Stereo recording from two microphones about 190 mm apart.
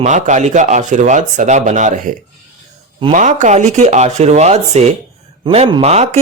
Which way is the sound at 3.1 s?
40° right (ahead or behind).